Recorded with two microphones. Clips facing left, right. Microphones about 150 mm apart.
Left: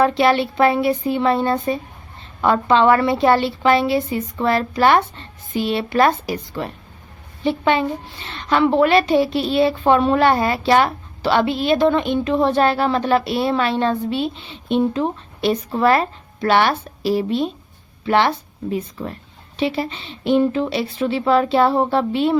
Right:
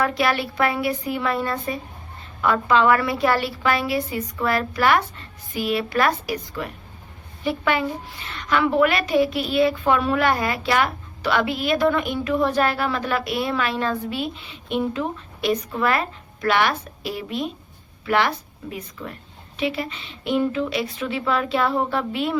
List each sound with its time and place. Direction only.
0.0 s a woman's voice: 25° left (ahead or behind)